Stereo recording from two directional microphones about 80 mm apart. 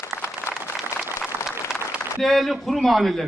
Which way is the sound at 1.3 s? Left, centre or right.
Right.